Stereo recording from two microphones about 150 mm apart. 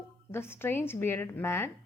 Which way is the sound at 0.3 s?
15° left (ahead or behind).